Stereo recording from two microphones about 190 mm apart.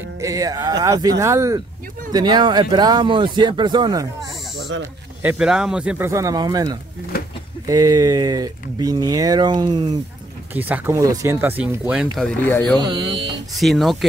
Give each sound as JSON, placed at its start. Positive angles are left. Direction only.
{"t": 0.2, "sound": "speech", "side_deg": -20}
{"t": 5.2, "sound": "speech", "side_deg": -5}
{"t": 7.1, "sound": "a sound", "side_deg": 55}
{"t": 7.6, "sound": "speech", "side_deg": -20}
{"t": 10.5, "sound": "speech", "side_deg": -10}
{"t": 12.4, "sound": "speech", "side_deg": 10}
{"t": 12.7, "sound": "speech", "side_deg": -20}
{"t": 13.6, "sound": "speech", "side_deg": 0}